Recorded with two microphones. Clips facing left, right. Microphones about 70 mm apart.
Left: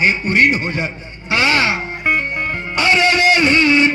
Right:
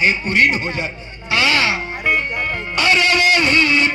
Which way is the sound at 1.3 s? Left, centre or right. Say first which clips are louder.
Left 1 dB; left.